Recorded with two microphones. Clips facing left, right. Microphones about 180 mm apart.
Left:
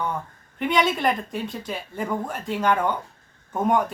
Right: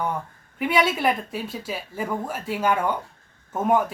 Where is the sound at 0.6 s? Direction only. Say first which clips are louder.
Even; 5° right (ahead or behind).